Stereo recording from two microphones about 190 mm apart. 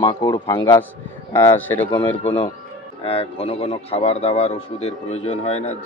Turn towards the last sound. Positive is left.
turn(degrees=35)  # may be behind; listen again after turning